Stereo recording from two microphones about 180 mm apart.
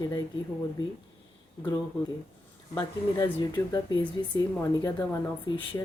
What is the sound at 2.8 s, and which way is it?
A woman's voice, 20° left (ahead or behind).